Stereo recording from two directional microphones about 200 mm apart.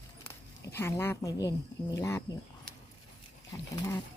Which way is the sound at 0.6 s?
10° left (ahead or behind).